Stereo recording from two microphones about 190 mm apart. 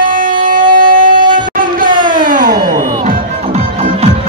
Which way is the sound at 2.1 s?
45° right (ahead or behind).